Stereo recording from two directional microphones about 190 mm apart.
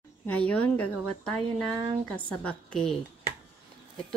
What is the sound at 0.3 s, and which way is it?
Speech, 5° left (ahead or behind).